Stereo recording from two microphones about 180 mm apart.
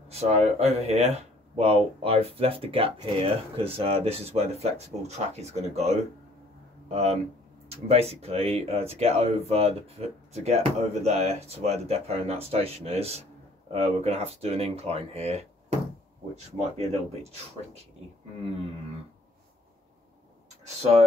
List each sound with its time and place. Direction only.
0.1 s speech: 35° right (ahead or behind)
20.6 s speech: 35° right (ahead or behind)